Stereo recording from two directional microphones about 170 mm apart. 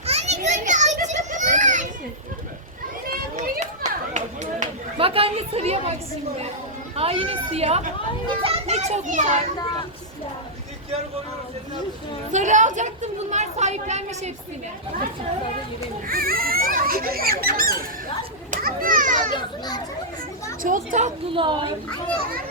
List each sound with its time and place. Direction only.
0.0 s children playing: 40° right (ahead or behind)
3.1 s children playing: 55° right (ahead or behind)
3.8 s chatter: 45° right (ahead or behind)
6.9 s a child's voice: 35° right (ahead or behind)
12.3 s a woman's voice: 45° right (ahead or behind)
16.0 s speech: 60° right (ahead or behind)
18.5 s children playing: 55° right (ahead or behind)
19.3 s children playing: 25° left (ahead or behind)
20.6 s a woman's voice: 50° right (ahead or behind)
21.2 s a woman's voice: 30° right (ahead or behind)